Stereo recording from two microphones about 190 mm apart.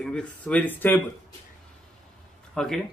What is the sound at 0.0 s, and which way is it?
Speech, 5° left (ahead or behind).